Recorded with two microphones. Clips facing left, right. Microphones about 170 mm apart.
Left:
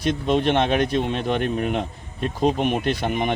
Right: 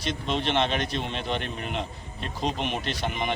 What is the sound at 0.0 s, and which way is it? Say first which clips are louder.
A man's voice: left 8 dB; 50° left (ahead or behind).